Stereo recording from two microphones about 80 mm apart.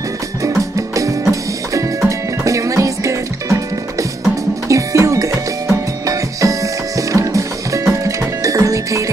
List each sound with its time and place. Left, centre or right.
0.4 s music: right
4.6 s cowbell: right
6.0 s music: right